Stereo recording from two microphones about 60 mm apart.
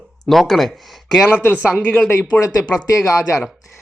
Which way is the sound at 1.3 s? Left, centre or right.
Left.